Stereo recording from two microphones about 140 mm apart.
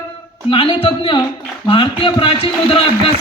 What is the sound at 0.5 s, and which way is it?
A man's voice, 40° left (ahead or behind).